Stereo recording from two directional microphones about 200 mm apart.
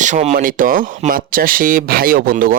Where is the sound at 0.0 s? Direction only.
35° right (ahead or behind).